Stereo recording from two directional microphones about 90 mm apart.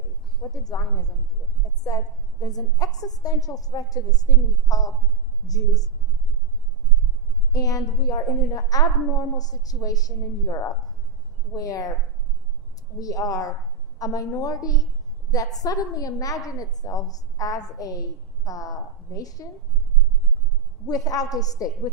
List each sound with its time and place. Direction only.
0.5 s a woman's voice: 45° left (ahead or behind)
2.4 s a woman's voice: 45° left (ahead or behind)
7.5 s a woman's voice: 40° left (ahead or behind)
13.0 s a woman's voice: 40° left (ahead or behind)
20.8 s a woman's voice: 45° left (ahead or behind)